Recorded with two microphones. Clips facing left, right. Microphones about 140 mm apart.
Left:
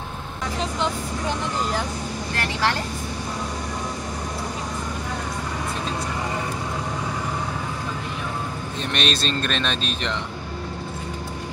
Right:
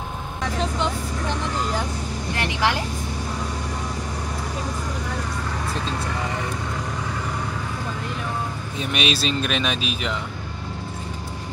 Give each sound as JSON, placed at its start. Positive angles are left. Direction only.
{"t": 2.3, "sound": "speech", "side_deg": -15}
{"t": 8.9, "sound": "speech", "side_deg": -10}